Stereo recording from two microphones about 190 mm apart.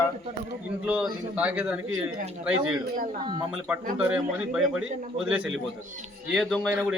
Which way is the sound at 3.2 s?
25° right (ahead or behind).